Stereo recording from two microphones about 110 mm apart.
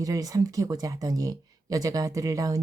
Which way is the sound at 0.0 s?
30° right (ahead or behind).